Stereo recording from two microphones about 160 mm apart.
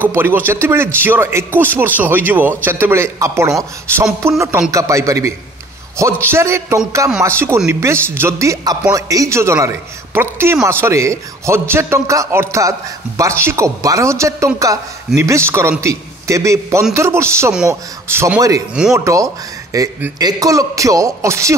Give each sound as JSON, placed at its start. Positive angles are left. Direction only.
{"t": 0.0, "sound": "a man's voice", "side_deg": -15}
{"t": 6.3, "sound": "a man's voice", "side_deg": -15}
{"t": 10.7, "sound": "a man's voice", "side_deg": -15}